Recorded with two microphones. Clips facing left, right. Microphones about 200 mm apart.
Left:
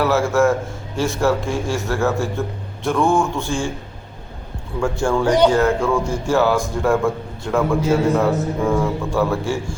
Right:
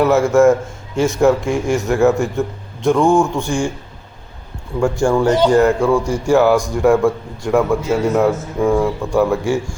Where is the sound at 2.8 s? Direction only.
15° right (ahead or behind).